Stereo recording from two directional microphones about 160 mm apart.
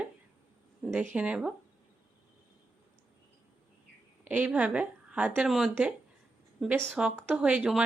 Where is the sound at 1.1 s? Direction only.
10° right (ahead or behind).